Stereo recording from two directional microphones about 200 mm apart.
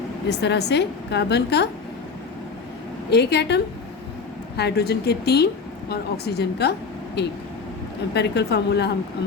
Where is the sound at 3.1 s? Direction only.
55° left (ahead or behind).